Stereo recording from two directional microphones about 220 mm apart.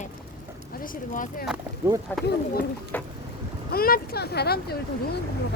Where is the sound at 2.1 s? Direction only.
10° left (ahead or behind).